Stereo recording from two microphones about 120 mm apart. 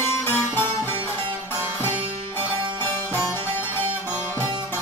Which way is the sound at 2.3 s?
15° left (ahead or behind).